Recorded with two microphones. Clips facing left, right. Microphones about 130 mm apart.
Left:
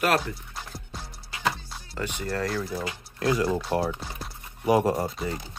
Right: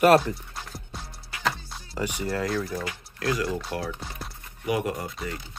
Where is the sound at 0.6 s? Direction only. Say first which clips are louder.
Even; centre (ahead or behind).